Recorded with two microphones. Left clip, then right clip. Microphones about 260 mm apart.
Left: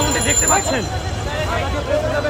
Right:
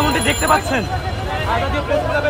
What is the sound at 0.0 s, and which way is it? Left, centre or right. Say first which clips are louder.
Speech: right 1 dB; right.